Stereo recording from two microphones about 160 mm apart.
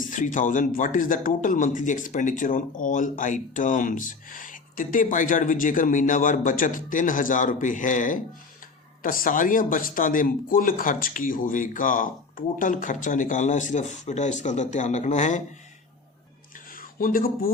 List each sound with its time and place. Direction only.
0.1 s speech: 55° left (ahead or behind)
17.0 s speech: 60° left (ahead or behind)